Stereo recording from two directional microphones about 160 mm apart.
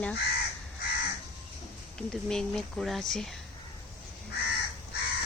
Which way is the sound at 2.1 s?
5° left (ahead or behind).